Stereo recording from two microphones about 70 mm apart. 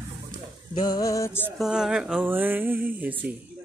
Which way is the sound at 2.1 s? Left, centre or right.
Right.